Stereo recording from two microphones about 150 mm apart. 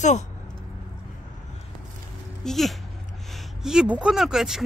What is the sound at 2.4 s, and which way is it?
Speech, centre (ahead or behind).